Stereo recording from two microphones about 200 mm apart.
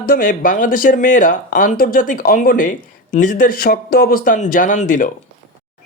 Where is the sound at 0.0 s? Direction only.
45° left (ahead or behind).